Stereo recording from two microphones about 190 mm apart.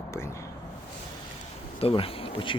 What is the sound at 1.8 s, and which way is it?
Insect, 30° left (ahead or behind).